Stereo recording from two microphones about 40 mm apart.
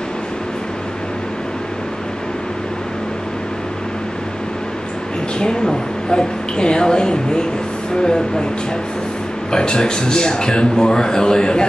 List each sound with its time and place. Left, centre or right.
5.4 s speech: centre
9.5 s speech: centre